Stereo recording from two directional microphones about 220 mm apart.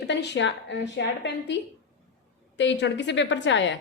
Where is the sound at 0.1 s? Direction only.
55° left (ahead or behind).